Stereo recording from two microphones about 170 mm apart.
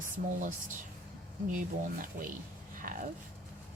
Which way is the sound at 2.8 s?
50° right (ahead or behind).